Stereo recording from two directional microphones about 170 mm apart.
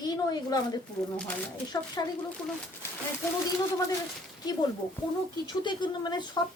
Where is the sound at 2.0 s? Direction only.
20° left (ahead or behind).